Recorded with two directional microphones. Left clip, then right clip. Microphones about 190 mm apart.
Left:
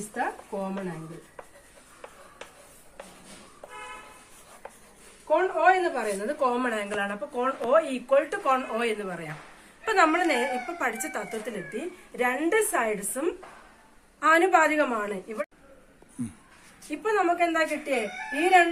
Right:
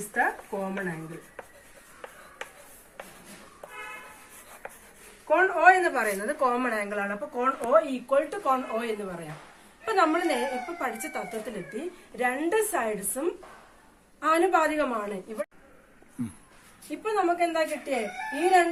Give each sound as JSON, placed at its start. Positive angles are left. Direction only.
{"t": 0.1, "sound": "speech", "side_deg": -10}
{"t": 4.6, "sound": "a sound", "side_deg": -15}
{"t": 5.3, "sound": "a woman's voice", "side_deg": 0}
{"t": 6.0, "sound": "speech", "side_deg": 15}
{"t": 7.9, "sound": "a woman's voice", "side_deg": 15}
{"t": 14.2, "sound": "speech", "side_deg": 15}
{"t": 16.9, "sound": "speech", "side_deg": 10}